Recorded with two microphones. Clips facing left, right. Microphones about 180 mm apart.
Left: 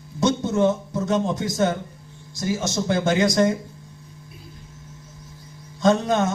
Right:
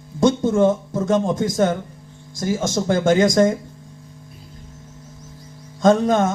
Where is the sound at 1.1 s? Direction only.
50° right (ahead or behind).